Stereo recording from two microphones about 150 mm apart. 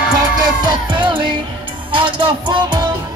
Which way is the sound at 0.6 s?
30° right (ahead or behind).